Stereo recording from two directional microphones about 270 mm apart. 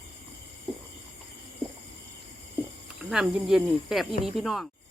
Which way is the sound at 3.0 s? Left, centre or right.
Centre.